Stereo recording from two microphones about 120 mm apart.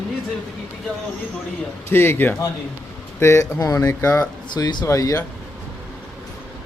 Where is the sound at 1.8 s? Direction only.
20° left (ahead or behind).